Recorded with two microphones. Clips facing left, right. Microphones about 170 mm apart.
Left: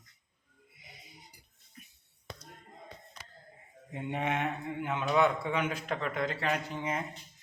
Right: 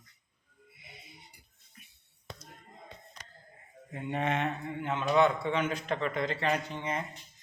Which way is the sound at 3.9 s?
15° left (ahead or behind).